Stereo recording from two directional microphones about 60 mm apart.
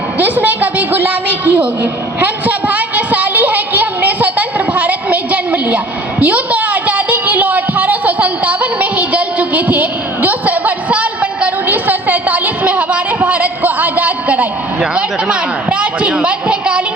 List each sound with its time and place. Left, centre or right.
0.2 s a woman's voice: right